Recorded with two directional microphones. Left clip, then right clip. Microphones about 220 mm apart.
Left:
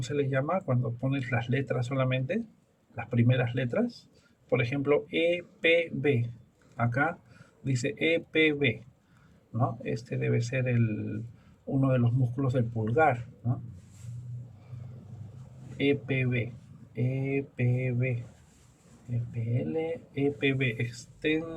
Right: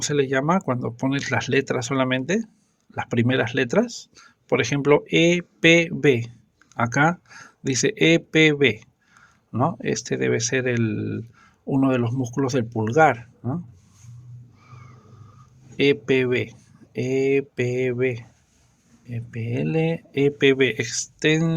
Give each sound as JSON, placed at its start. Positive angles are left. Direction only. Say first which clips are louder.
{"t": 0.0, "sound": "speech", "louder": "right 8 dB", "side_deg": -50}
{"t": 15.8, "sound": "speech", "louder": "right 9 dB", "side_deg": -50}
{"t": 19.3, "sound": "speech", "louder": "right 8 dB", "side_deg": -50}